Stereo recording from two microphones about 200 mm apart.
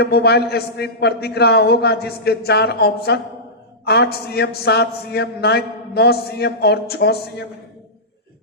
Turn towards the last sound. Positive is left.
turn(degrees=55)  # may be behind; listen again after turning